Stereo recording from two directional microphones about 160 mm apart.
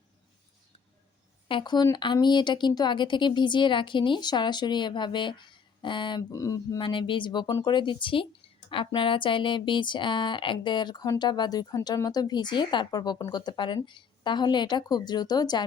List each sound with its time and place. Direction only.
1.5 s speech: 30° left (ahead or behind)